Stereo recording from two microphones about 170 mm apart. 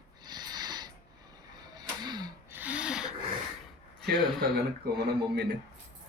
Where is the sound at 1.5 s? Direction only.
25° right (ahead or behind).